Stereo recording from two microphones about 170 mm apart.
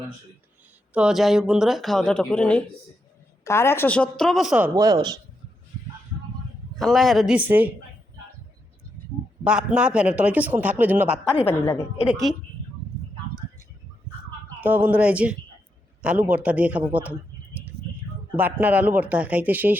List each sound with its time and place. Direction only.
0.9 s a woman's voice: 5° right (ahead or behind)
4.7 s speech: 20° right (ahead or behind)
6.7 s speech: centre (ahead or behind)
9.4 s a man's voice: 5° right (ahead or behind)
14.6 s a man's voice: 10° right (ahead or behind)
18.3 s a man's voice: 10° right (ahead or behind)